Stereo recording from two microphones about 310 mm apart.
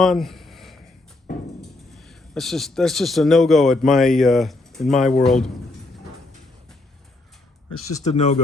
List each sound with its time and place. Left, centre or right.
0.0 s a sound: centre
1.9 s speech: centre
7.7 s speech: centre